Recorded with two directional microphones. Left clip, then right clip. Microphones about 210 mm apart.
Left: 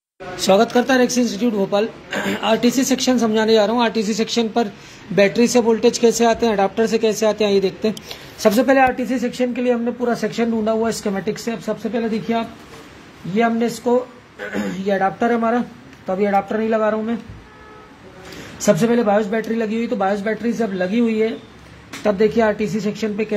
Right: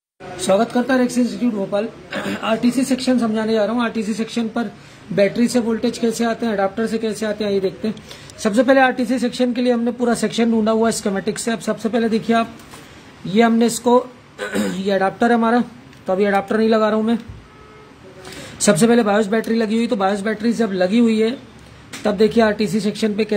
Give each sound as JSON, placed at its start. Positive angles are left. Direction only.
{"t": 0.5, "sound": "speech", "side_deg": -10}
{"t": 18.7, "sound": "speech", "side_deg": -30}